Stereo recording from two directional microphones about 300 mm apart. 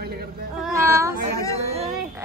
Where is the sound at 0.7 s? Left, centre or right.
Centre.